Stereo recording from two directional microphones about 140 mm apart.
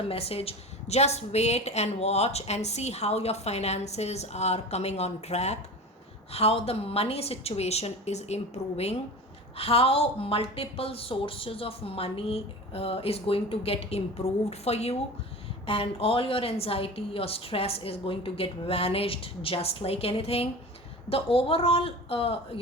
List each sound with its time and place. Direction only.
0.1 s a woman's voice: 45° left (ahead or behind)